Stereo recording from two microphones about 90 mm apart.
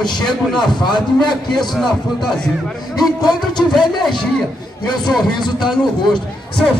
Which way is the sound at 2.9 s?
50° left (ahead or behind).